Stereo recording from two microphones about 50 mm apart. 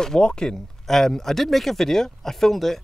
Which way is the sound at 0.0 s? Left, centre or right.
Centre.